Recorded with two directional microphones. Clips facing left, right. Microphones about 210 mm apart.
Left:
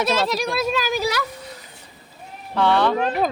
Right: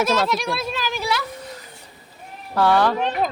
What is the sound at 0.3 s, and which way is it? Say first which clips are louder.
Speech: left 2 dB; 40° left (ahead or behind).